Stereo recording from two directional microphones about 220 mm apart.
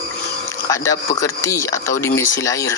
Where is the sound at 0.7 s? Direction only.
15° left (ahead or behind).